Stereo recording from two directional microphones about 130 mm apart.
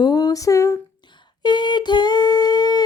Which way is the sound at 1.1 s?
35° left (ahead or behind).